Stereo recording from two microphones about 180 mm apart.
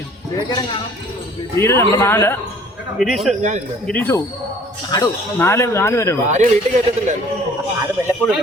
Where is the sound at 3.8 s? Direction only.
10° left (ahead or behind).